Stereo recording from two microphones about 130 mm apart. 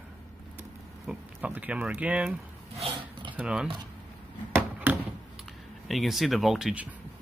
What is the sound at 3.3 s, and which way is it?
Speech, 5° right (ahead or behind).